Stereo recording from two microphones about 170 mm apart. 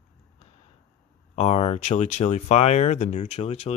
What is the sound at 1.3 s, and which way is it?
Speech, 40° left (ahead or behind).